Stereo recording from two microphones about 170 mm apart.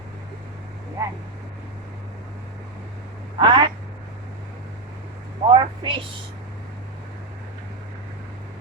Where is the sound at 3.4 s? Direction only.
25° right (ahead or behind).